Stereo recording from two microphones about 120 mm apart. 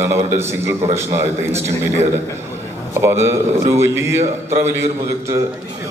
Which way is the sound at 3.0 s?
20° right (ahead or behind).